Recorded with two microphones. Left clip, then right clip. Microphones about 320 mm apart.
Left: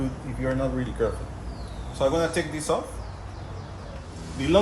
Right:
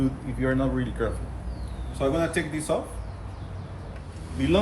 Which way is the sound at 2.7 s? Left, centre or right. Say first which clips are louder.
Left 1 dB; centre.